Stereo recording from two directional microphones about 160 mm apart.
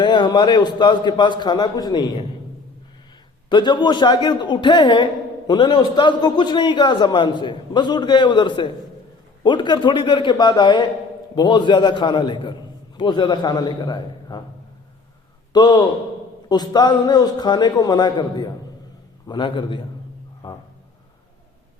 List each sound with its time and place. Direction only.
0.0 s a man's voice: 25° left (ahead or behind)
3.5 s a man's voice: 30° left (ahead or behind)
15.5 s a man's voice: 25° left (ahead or behind)
20.4 s music: 30° left (ahead or behind)